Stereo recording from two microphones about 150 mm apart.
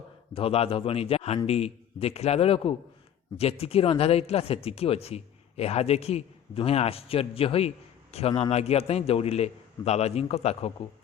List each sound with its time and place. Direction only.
0.3 s a man's voice: 40° left (ahead or behind)